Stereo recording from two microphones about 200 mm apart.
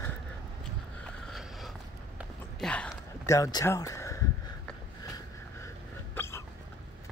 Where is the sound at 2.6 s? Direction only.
5° left (ahead or behind).